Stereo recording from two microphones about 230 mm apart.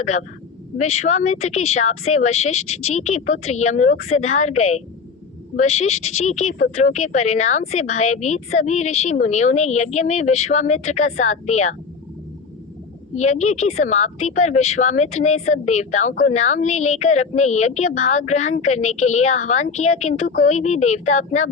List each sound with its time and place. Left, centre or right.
0.0 s a woman's voice: left
13.1 s a woman's voice: left